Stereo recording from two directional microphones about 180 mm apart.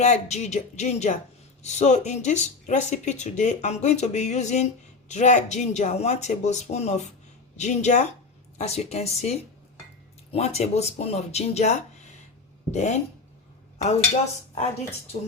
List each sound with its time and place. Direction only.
0.0 s speech: 40° left (ahead or behind)